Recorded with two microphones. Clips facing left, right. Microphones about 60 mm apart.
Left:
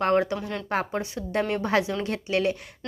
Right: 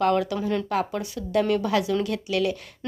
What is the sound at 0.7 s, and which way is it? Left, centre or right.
A woman's voice, left.